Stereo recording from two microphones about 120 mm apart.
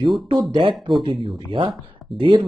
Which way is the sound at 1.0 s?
50° right (ahead or behind).